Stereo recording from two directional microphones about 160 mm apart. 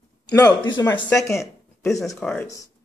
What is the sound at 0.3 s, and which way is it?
Speech, 25° left (ahead or behind).